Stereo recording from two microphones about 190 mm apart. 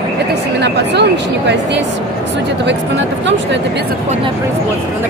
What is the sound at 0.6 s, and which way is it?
Speech, 60° right (ahead or behind).